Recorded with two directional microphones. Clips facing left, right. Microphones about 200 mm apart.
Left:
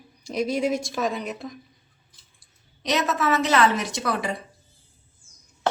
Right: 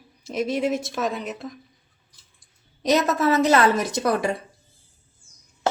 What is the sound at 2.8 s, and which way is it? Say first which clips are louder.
A woman's voice: right 4 dB; 40° right (ahead or behind).